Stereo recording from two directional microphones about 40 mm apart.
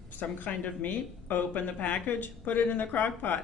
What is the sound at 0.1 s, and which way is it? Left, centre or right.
A man's voice, left.